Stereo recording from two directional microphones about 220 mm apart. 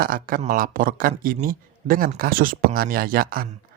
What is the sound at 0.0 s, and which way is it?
Speech, 40° right (ahead or behind).